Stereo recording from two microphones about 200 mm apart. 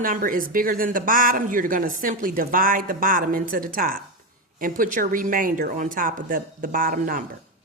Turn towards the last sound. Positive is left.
turn(degrees=-45)  # may be behind; listen again after turning